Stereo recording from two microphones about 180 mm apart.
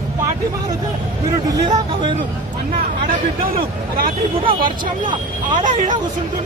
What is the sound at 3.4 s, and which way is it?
Speech, 55° right (ahead or behind).